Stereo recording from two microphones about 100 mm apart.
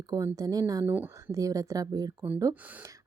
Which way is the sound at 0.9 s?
20° right (ahead or behind).